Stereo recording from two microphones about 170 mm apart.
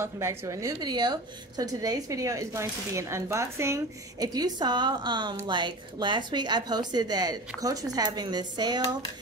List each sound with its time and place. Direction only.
0.0 s a woman's voice: 15° right (ahead or behind)